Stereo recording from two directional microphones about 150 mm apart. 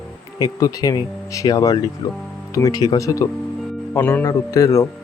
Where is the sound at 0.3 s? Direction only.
25° left (ahead or behind).